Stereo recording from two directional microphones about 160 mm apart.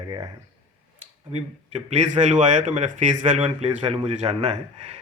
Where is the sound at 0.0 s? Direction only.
25° right (ahead or behind).